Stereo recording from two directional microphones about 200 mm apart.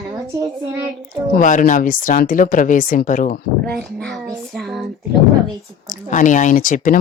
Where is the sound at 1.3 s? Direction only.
40° left (ahead or behind).